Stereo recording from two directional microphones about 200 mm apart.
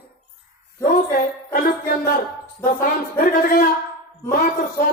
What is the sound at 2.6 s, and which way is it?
A woman's voice, 45° left (ahead or behind).